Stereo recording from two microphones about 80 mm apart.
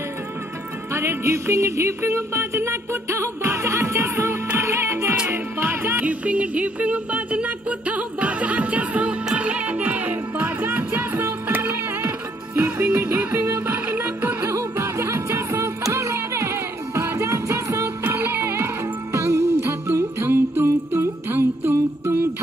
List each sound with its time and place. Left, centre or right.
0.9 s music: right
6.0 s music: centre
14.4 s music: right